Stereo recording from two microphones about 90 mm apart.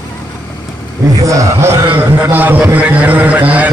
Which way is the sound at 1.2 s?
40° right (ahead or behind).